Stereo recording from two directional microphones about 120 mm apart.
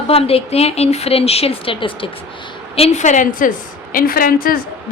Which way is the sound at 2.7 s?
65° left (ahead or behind).